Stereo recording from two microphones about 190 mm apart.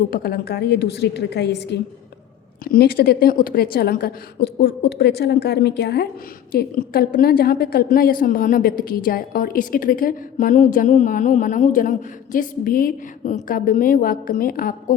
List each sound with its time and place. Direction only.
0.1 s a woman's voice: 55° left (ahead or behind)